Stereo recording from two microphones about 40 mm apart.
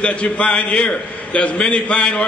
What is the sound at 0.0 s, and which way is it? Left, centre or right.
A man's voice, left.